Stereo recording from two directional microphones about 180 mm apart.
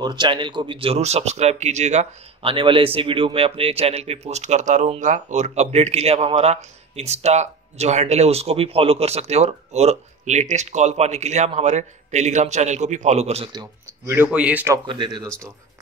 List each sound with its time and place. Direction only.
0.0 s speech: 25° right (ahead or behind)
13.5 s speech: 20° right (ahead or behind)
14.1 s speech: 10° right (ahead or behind)
14.9 s speech: 25° right (ahead or behind)
15.2 s speech: 5° left (ahead or behind)